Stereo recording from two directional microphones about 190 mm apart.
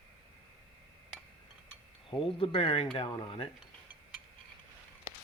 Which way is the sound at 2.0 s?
25° left (ahead or behind).